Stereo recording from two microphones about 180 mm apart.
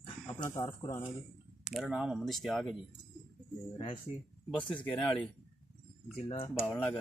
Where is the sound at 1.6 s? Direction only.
Centre (ahead or behind).